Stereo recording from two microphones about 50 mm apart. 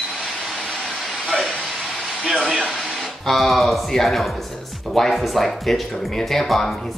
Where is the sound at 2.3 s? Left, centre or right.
Centre.